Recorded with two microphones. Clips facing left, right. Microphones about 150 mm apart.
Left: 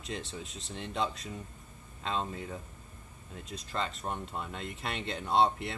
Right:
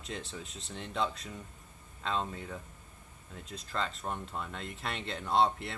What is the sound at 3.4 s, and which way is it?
Speech, centre (ahead or behind).